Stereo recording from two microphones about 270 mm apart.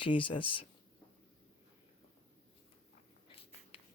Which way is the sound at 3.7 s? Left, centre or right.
Centre.